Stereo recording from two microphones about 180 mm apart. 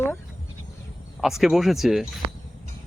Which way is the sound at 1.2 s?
Centre (ahead or behind).